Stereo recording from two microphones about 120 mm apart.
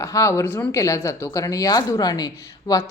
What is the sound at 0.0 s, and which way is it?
Speech, 25° left (ahead or behind).